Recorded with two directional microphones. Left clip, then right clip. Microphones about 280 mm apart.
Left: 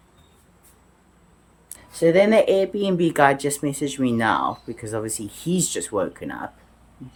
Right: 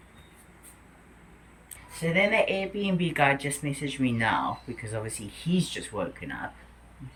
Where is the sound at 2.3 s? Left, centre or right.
Centre.